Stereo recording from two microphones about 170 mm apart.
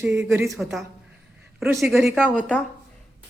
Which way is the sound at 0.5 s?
Centre (ahead or behind).